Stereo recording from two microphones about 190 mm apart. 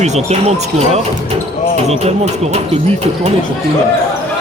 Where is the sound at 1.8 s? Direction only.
35° right (ahead or behind).